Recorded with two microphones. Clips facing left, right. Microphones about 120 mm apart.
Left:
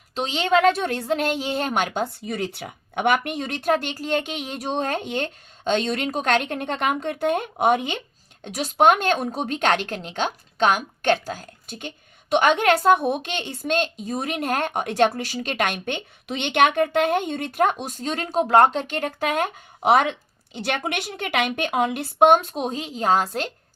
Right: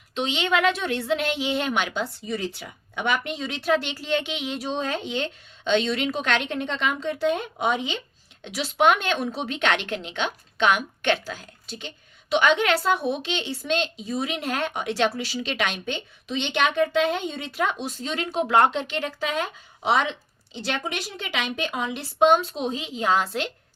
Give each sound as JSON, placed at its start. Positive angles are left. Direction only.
{"t": 0.1, "sound": "a woman's voice", "side_deg": 40}